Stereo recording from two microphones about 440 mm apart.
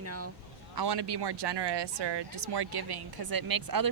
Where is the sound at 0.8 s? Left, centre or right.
Right.